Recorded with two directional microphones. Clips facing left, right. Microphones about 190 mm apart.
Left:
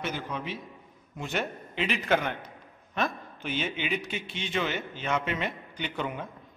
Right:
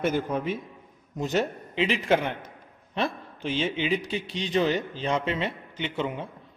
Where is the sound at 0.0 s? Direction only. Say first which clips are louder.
Right 8 dB; 50° right (ahead or behind).